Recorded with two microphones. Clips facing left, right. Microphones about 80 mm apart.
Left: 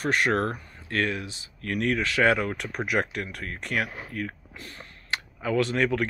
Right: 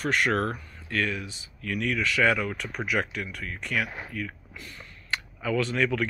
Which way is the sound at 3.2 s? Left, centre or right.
Left.